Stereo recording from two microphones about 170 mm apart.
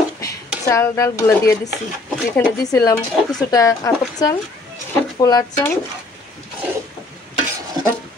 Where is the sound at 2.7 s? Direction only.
20° left (ahead or behind).